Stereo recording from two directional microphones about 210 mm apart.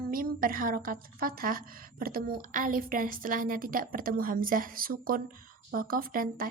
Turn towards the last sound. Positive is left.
turn(degrees=-40)  # may be behind; listen again after turning